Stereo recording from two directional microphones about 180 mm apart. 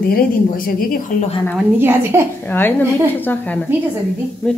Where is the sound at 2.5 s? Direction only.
10° left (ahead or behind).